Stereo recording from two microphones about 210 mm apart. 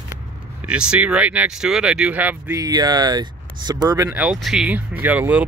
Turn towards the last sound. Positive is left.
turn(degrees=-5)  # may be behind; listen again after turning